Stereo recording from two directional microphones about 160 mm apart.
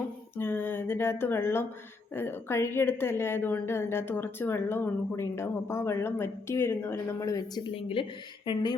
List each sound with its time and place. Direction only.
0.3 s a woman's voice: 15° left (ahead or behind); by 8.6 s 30° left (ahead or behind)